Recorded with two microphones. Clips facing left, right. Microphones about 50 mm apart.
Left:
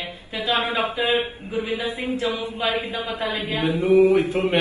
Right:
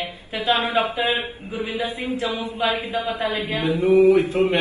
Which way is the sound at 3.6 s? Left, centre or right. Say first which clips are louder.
Right 1 dB; left.